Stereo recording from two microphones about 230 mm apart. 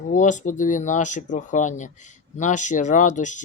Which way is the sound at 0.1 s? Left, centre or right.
Left.